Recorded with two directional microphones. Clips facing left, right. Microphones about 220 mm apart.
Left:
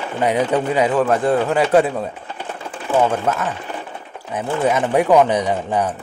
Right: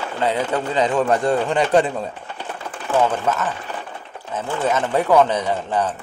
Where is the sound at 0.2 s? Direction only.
15° left (ahead or behind).